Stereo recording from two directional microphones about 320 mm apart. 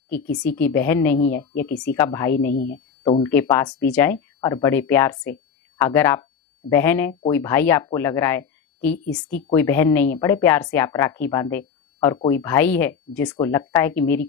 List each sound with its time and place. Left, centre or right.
0.5 s speech: centre
2.5 s speech: left
3.0 s speech: centre